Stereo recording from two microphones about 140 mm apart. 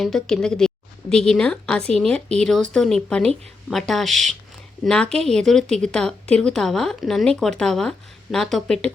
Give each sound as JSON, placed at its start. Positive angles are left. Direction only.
{"t": 0.0, "sound": "speech", "side_deg": 5}